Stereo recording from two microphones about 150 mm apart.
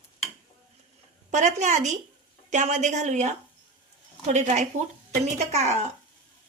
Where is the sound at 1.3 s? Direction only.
55° right (ahead or behind).